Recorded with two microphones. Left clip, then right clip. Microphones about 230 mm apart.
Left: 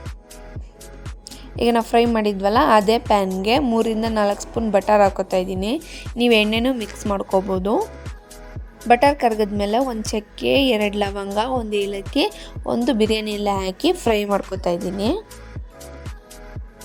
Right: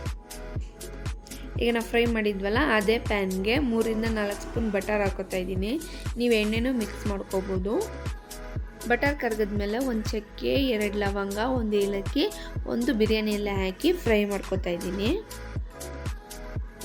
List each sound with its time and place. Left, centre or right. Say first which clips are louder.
1.5 s a woman's voice: left 8 dB; left
8.9 s a woman's voice: left 10 dB; left